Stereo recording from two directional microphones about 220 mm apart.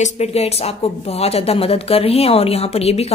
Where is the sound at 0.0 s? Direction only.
30° left (ahead or behind).